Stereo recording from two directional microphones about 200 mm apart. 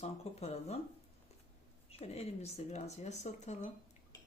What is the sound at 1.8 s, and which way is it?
Speech, 30° left (ahead or behind).